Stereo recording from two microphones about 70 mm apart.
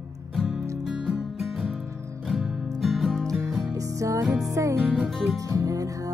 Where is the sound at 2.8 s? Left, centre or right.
Centre.